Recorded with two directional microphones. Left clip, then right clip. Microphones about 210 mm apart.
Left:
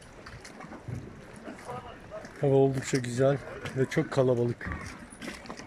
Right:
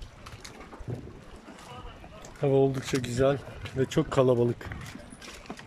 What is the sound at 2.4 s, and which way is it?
Speech, centre (ahead or behind).